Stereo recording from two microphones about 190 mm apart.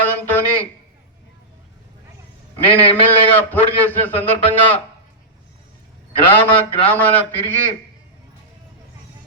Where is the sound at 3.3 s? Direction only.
10° left (ahead or behind).